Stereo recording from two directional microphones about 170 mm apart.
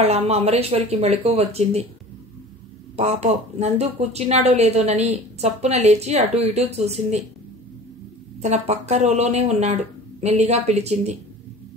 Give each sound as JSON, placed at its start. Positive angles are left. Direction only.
{"t": 0.0, "sound": "a woman's voice", "side_deg": -35}
{"t": 3.0, "sound": "a woman's voice", "side_deg": -40}
{"t": 8.4, "sound": "a woman's voice", "side_deg": -40}